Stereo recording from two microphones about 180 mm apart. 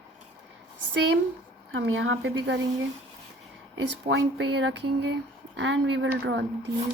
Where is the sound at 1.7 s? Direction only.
90° right.